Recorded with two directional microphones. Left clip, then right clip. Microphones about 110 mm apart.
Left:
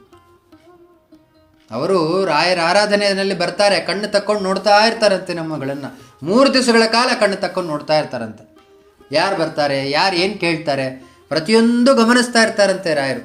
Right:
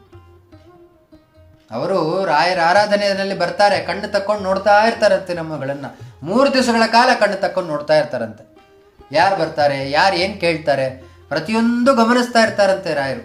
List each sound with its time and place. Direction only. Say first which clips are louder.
1.7 s a man's voice: left 2 dB; 20° left (ahead or behind)
6.2 s a man's voice: left 1 dB; 30° left (ahead or behind)
7.6 s speech: right 2 dB; centre (ahead or behind)
9.0 s speech: right 2 dB; 25° left (ahead or behind)
10.2 s speech: even; centre (ahead or behind)
11.3 s a man's voice: left 4 dB; 30° left (ahead or behind)